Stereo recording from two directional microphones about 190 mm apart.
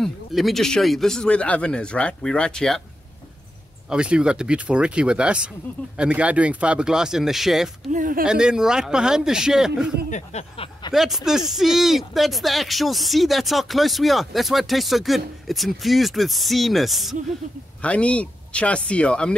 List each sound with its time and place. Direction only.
0.0 s speech: centre (ahead or behind)
3.9 s speech: 5° right (ahead or behind)
7.9 s speech: 45° right (ahead or behind)
8.2 s speech: 5° right (ahead or behind)
10.0 s a sound: 40° left (ahead or behind)
10.9 s speech: centre (ahead or behind)